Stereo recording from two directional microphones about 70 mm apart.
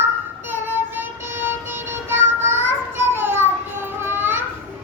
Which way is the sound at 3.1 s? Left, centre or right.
Right.